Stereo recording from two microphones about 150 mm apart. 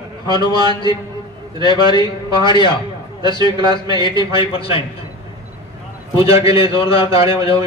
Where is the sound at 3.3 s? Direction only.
25° right (ahead or behind).